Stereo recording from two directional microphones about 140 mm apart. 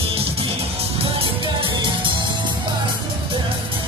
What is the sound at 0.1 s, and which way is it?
Music, 45° right (ahead or behind).